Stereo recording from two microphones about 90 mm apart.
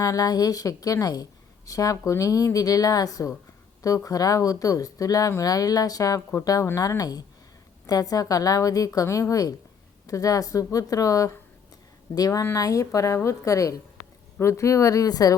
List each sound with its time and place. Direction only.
0.0 s a woman's voice: 40° left (ahead or behind)